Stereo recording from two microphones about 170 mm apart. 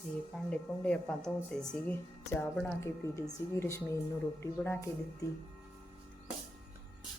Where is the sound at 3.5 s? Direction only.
15° left (ahead or behind).